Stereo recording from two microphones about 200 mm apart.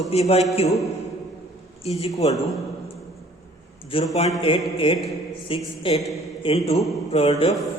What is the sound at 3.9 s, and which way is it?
Speech, 30° left (ahead or behind).